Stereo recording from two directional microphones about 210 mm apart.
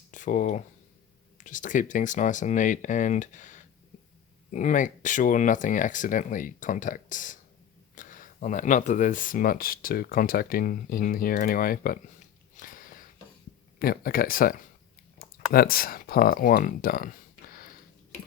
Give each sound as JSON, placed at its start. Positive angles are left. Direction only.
{"t": 0.1, "sound": "speech", "side_deg": 35}
{"t": 12.5, "sound": "a sound", "side_deg": 40}
{"t": 13.7, "sound": "speech", "side_deg": 45}
{"t": 15.5, "sound": "speech", "side_deg": 45}